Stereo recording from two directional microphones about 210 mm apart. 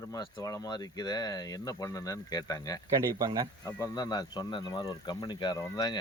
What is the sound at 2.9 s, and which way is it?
Speech, 15° right (ahead or behind).